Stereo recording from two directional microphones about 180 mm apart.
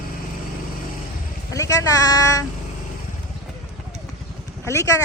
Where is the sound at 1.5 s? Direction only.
20° left (ahead or behind).